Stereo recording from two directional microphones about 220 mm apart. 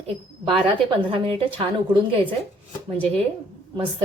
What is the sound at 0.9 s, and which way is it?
A woman's voice, 25° right (ahead or behind).